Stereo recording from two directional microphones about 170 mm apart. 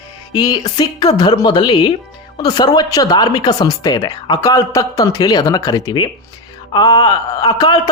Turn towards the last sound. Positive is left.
turn(degrees=25)  # may be behind; listen again after turning